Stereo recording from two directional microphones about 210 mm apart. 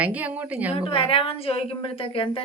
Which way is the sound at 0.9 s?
25° left (ahead or behind).